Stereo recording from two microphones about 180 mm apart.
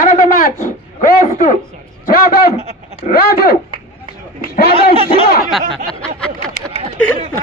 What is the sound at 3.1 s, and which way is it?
Speech, 60° left (ahead or behind).